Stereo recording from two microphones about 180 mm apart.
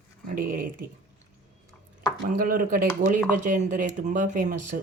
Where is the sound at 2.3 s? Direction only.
50° right (ahead or behind).